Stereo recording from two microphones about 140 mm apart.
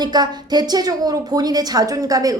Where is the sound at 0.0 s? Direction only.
30° right (ahead or behind).